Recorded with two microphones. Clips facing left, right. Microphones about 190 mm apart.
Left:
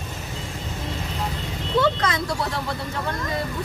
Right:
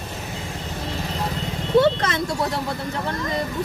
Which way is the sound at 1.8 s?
25° right (ahead or behind).